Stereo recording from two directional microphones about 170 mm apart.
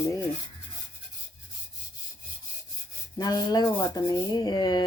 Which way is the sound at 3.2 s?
20° left (ahead or behind).